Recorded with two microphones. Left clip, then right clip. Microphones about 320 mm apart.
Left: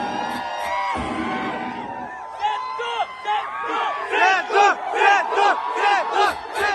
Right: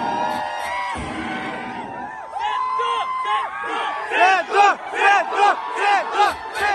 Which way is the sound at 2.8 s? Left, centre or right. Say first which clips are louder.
Right 3 dB; centre.